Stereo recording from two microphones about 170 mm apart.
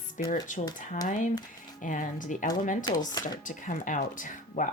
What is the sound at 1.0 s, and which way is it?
Speech, 45° left (ahead or behind).